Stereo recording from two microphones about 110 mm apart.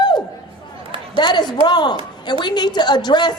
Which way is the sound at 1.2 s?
40° left (ahead or behind).